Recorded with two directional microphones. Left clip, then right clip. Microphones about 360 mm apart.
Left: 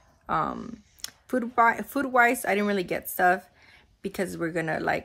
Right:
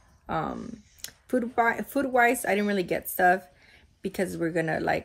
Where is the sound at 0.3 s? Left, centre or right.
Centre.